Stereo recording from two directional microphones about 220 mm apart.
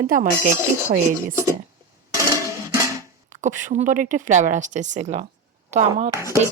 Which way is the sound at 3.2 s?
35° right (ahead or behind).